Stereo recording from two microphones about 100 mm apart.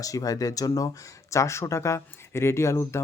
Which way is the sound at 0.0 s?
35° left (ahead or behind).